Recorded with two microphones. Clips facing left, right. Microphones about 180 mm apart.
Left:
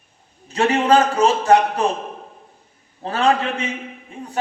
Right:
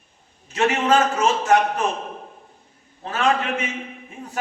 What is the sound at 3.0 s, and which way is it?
Speech, 35° left (ahead or behind).